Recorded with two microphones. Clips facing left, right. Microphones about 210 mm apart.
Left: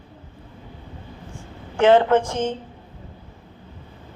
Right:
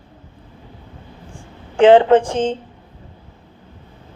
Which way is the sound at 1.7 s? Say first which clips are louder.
Right 5 dB; 15° right (ahead or behind).